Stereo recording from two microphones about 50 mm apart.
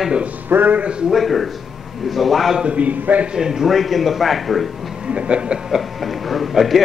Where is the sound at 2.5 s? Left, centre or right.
Right.